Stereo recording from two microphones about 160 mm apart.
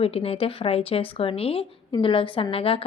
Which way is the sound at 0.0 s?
40° left (ahead or behind).